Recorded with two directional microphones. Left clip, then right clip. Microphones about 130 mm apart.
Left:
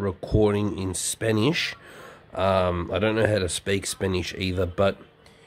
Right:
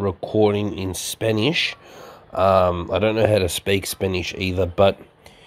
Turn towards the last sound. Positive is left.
turn(degrees=-5)  # may be behind; listen again after turning